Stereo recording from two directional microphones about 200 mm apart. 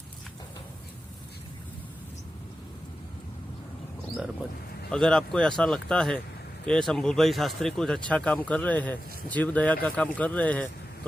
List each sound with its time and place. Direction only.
4.9 s speech: 5° left (ahead or behind)